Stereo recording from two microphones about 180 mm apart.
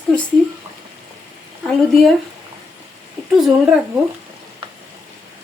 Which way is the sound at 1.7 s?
5° left (ahead or behind).